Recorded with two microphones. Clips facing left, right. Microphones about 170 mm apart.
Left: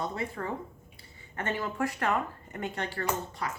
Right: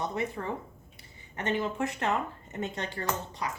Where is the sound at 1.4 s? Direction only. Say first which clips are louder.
Right 1 dB; 20° right (ahead or behind).